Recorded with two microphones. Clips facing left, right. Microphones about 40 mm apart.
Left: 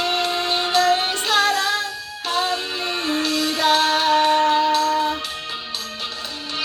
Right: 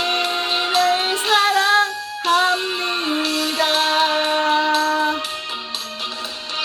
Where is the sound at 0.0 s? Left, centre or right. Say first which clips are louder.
Right 1 dB; right.